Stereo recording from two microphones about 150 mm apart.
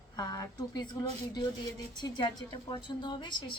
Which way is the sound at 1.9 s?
30° left (ahead or behind).